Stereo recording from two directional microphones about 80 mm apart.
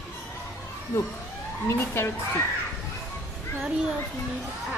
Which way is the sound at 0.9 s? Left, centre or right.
Left.